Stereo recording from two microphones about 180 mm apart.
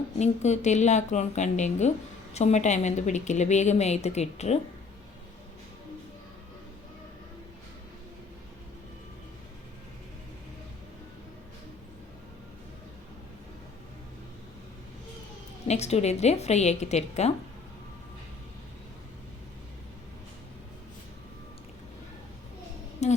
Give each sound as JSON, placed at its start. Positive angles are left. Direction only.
{"t": 0.2, "sound": "a woman's voice", "side_deg": 40}
{"t": 15.6, "sound": "a woman's voice", "side_deg": 35}
{"t": 23.0, "sound": "a sound", "side_deg": 40}